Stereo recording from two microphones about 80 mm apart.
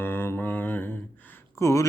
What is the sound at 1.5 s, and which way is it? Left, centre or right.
Speech, left.